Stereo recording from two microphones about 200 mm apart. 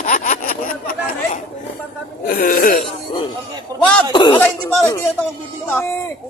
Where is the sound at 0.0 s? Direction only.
40° left (ahead or behind).